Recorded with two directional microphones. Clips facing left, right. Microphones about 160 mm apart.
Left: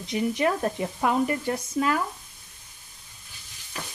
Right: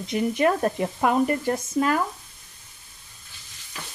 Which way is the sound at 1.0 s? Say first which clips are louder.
Right 3 dB; 45° right (ahead or behind).